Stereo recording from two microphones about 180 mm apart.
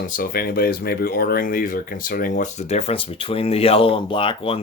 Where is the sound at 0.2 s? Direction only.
55° left (ahead or behind).